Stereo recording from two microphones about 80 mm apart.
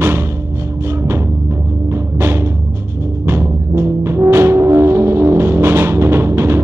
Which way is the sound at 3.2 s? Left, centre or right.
Right.